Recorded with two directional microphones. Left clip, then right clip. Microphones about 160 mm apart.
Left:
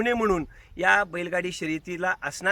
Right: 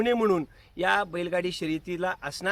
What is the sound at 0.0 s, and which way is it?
Speech, 10° left (ahead or behind).